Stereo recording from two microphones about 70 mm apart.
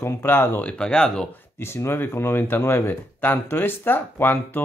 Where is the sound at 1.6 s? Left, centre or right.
Left.